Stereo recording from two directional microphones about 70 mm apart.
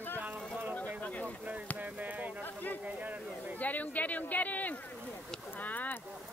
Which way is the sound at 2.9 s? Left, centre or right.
Right.